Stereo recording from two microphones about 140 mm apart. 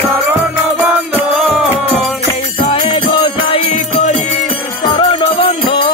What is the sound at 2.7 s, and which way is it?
Music, 40° left (ahead or behind).